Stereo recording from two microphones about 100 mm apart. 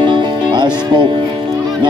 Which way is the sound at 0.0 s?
50° right (ahead or behind).